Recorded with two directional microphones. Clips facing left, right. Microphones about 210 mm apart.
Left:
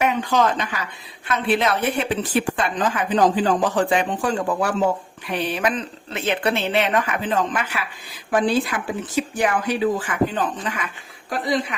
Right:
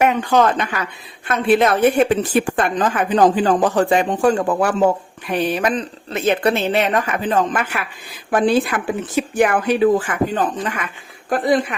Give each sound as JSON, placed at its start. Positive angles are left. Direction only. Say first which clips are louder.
{"t": 0.0, "sound": "a woman's voice", "louder": "right 4 dB", "side_deg": -55}
{"t": 10.3, "sound": "speech", "louder": "right 4 dB", "side_deg": -45}